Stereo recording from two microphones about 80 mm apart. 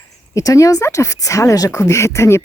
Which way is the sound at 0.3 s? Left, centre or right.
Left.